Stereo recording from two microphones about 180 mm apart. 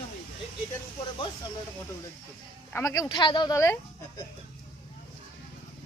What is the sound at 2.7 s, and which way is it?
Speech, 20° left (ahead or behind).